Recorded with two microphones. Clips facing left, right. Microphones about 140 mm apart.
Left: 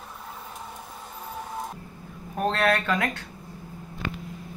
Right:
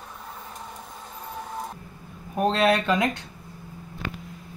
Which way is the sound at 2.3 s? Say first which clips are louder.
Right 3 dB; 15° right (ahead or behind).